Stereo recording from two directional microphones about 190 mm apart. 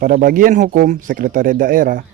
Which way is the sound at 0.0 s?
50° right (ahead or behind).